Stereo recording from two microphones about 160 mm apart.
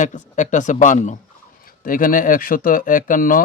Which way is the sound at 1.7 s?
60° left (ahead or behind).